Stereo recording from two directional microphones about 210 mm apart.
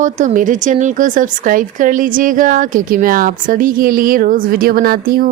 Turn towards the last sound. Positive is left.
turn(degrees=-45)  # may be behind; listen again after turning